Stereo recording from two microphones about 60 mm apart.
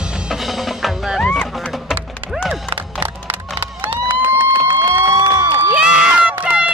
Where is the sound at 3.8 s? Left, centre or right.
Right.